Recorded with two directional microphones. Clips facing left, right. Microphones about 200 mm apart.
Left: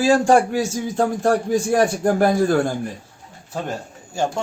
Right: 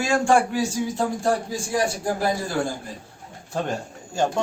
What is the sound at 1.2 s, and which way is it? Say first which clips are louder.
A man's voice: left 6 dB; 65° left (ahead or behind).